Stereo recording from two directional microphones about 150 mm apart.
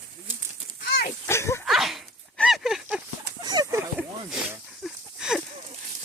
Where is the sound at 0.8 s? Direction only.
90° left.